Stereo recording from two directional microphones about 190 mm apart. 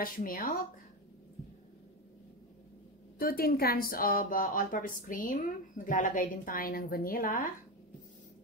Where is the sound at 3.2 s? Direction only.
50° left (ahead or behind).